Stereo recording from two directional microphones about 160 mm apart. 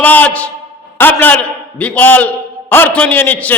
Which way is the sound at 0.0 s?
10° left (ahead or behind).